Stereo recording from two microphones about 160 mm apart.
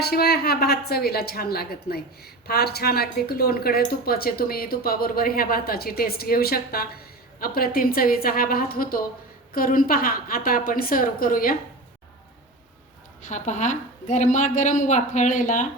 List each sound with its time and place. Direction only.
0.0 s a woman's voice: 80° left; by 11.5 s 60° left (ahead or behind)
13.2 s a woman's voice: 50° left (ahead or behind)